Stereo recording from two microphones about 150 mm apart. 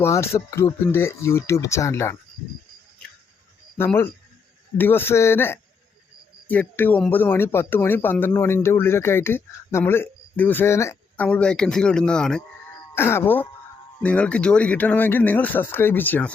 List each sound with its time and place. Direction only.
0.0 s speech: 20° left (ahead or behind)
3.8 s speech: 15° left (ahead or behind)
12.9 s speech: 15° left (ahead or behind)